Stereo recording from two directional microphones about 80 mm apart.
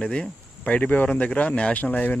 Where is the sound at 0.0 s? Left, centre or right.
Centre.